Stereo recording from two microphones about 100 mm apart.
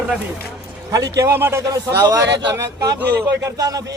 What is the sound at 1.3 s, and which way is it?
A man's voice, 25° right (ahead or behind).